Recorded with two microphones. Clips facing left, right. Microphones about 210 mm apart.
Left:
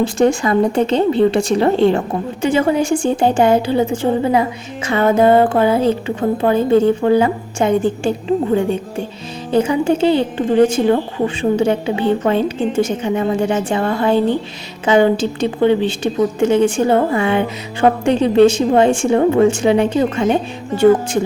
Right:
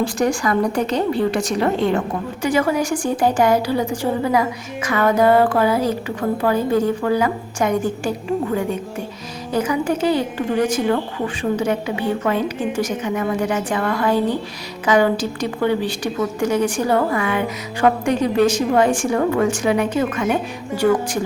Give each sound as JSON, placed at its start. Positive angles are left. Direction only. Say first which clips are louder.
{"t": 0.0, "sound": "a woman's voice", "louder": "left 5 dB", "side_deg": 25}